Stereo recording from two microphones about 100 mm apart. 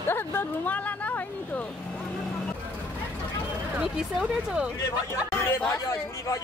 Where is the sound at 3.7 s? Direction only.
10° right (ahead or behind).